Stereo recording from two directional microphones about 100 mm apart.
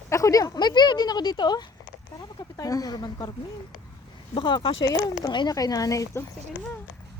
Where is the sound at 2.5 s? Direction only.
35° left (ahead or behind).